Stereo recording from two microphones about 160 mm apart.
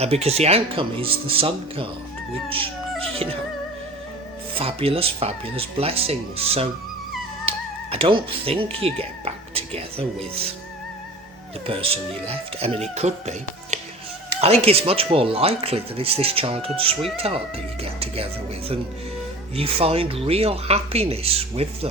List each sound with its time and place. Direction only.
0.0 s speech: 40° right (ahead or behind)
4.5 s speech: 35° right (ahead or behind)
7.4 s music: 35° right (ahead or behind)
8.8 s speech: 35° right (ahead or behind)
11.6 s speech: 35° right (ahead or behind)
19.5 s speech: 35° right (ahead or behind)